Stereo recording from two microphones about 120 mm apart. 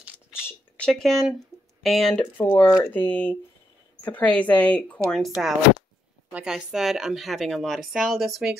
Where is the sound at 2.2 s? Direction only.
15° left (ahead or behind).